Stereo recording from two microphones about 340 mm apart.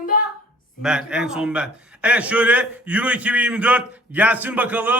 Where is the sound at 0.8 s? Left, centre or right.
Centre.